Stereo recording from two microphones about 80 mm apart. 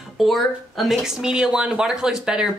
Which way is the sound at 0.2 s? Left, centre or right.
Centre.